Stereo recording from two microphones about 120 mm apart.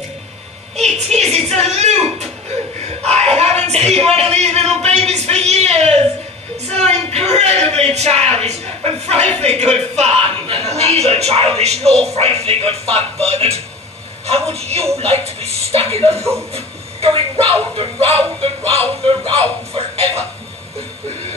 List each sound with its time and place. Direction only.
0.7 s music: 65° right (ahead or behind)
1.5 s a sound: 60° right (ahead or behind)
6.7 s speech: 70° right (ahead or behind); by 19.4 s 50° right (ahead or behind)
19.7 s music: 60° right (ahead or behind)